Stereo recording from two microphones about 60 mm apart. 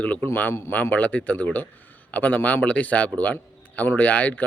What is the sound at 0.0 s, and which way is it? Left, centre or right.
Speech, left.